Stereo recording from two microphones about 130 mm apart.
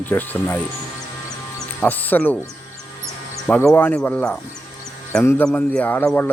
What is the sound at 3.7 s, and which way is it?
Speech, 10° left (ahead or behind).